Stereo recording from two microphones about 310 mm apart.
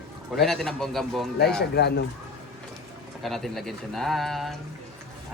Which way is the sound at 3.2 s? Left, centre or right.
Centre.